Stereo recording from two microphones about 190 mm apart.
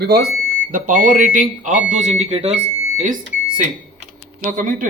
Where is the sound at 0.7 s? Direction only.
45° right (ahead or behind).